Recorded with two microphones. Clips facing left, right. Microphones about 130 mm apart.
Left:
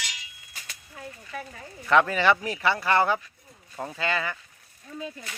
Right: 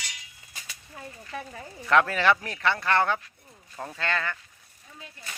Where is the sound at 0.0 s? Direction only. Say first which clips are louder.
Left 3 dB; 90° left.